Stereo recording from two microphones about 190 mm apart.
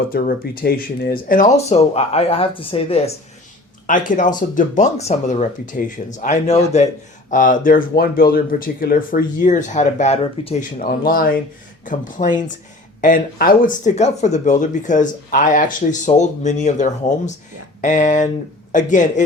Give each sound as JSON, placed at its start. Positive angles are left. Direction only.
{"t": 0.1, "sound": "speech", "side_deg": 50}
{"t": 3.8, "sound": "speech", "side_deg": 45}
{"t": 10.8, "sound": "speech", "side_deg": 50}